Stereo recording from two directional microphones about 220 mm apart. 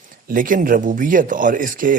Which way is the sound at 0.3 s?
40° right (ahead or behind).